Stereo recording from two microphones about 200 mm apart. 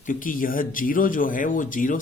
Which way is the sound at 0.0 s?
45° left (ahead or behind).